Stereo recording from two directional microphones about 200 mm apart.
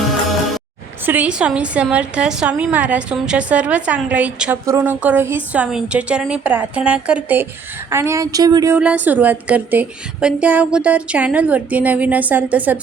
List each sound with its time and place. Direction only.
1.0 s a woman's voice: 10° right (ahead or behind)